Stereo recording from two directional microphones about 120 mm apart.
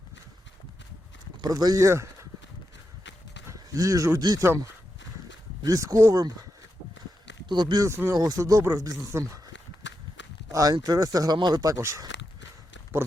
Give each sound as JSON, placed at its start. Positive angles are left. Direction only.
{"t": 1.4, "sound": "speech", "side_deg": -35}
{"t": 3.5, "sound": "speech", "side_deg": -25}
{"t": 7.4, "sound": "speech", "side_deg": -40}
{"t": 7.9, "sound": "speech", "side_deg": -20}
{"t": 10.5, "sound": "speech", "side_deg": -30}